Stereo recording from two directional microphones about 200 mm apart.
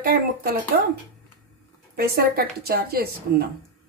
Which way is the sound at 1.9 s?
50° right (ahead or behind).